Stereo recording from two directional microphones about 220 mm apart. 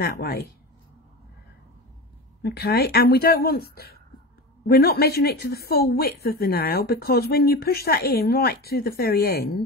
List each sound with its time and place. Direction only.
0.0 s speech: 45° left (ahead or behind)
2.4 s speech: 45° left (ahead or behind)